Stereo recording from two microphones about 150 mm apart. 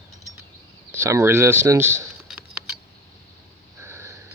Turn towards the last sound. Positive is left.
turn(degrees=-20)  # may be behind; listen again after turning